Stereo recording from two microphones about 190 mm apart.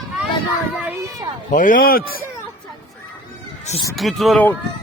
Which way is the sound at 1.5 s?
45° left (ahead or behind).